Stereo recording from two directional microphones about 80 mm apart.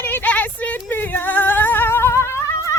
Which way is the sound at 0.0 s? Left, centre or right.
Left.